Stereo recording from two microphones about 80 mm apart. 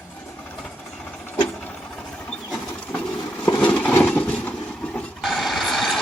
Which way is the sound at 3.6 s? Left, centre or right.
Centre.